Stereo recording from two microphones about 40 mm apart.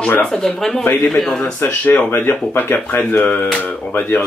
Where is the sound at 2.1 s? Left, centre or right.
Left.